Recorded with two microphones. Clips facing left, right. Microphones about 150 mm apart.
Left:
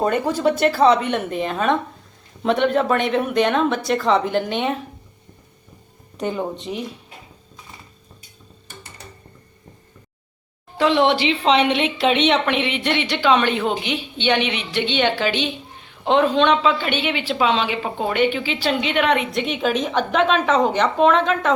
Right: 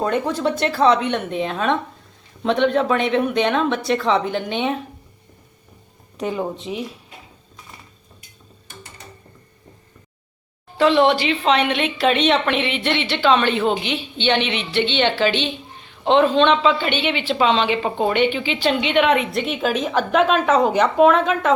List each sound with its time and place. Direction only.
0.0 s a woman's voice: 5° left (ahead or behind)
6.1 s a woman's voice: centre (ahead or behind)
10.8 s a woman's voice: 15° left (ahead or behind); by 21.5 s 5° right (ahead or behind)